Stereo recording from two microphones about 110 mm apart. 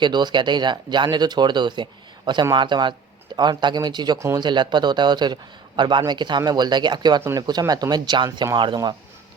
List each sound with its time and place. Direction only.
0.0 s speech: 40° right (ahead or behind)